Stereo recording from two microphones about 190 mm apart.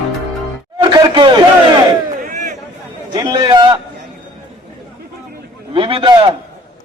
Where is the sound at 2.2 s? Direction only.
40° right (ahead or behind).